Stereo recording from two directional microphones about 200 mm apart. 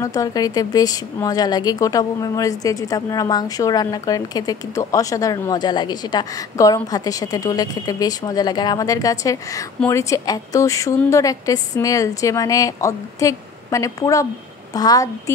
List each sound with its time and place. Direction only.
0.0 s a woman's voice: 15° left (ahead or behind)